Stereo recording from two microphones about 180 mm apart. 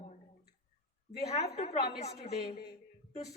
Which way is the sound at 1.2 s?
35° left (ahead or behind).